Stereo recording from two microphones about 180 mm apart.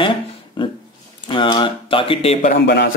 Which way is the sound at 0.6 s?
30° left (ahead or behind).